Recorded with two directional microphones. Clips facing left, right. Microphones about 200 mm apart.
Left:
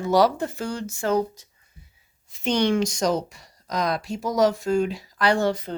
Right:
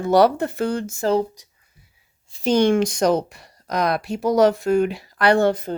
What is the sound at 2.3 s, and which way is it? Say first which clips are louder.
Speech: right 5 dB; 40° right (ahead or behind).